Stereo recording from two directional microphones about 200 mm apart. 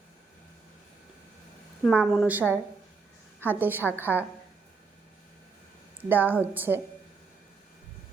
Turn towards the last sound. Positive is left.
turn(degrees=-10)  # may be behind; listen again after turning